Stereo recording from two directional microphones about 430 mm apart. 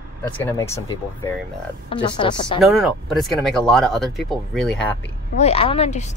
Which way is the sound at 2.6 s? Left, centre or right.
Centre.